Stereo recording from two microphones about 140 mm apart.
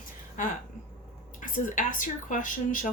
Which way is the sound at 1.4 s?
70° left (ahead or behind).